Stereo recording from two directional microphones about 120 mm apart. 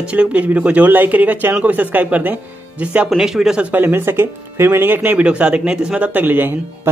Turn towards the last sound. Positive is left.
turn(degrees=-15)  # may be behind; listen again after turning